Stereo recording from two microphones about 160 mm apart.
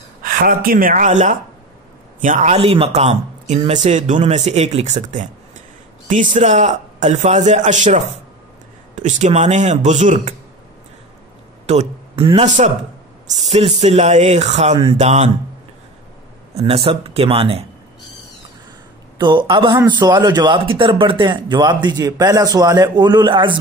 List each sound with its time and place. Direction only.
0.2 s speech: 65° right (ahead or behind)
11.6 s speech: 40° right (ahead or behind)
12.4 s speech: 50° right (ahead or behind)
16.5 s speech: 35° right (ahead or behind)
19.1 s a man's voice: 30° right (ahead or behind)